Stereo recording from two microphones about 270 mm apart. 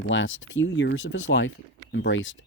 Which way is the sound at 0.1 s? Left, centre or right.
Left.